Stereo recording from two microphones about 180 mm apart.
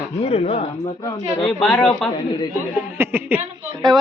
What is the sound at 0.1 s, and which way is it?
Speech, 35° left (ahead or behind).